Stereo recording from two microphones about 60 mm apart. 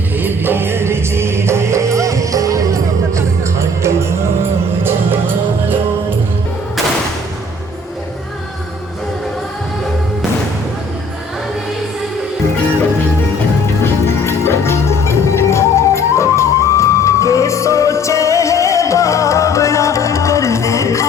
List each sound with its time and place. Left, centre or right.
0.2 s music: right
13.8 s music: left